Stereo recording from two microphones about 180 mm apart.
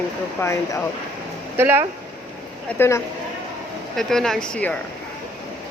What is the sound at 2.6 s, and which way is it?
Speech, 10° left (ahead or behind).